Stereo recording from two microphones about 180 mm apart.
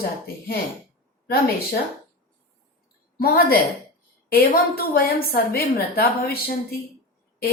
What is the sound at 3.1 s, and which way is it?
A woman's voice, 55° left (ahead or behind).